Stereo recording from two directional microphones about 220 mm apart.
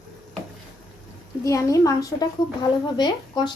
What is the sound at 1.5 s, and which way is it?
A woman's voice, 15° left (ahead or behind).